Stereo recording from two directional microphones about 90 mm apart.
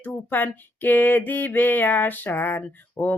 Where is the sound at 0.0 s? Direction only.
20° left (ahead or behind).